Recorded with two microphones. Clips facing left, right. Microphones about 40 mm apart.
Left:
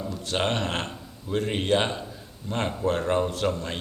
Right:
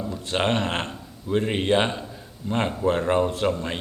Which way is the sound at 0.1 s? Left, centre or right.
Centre.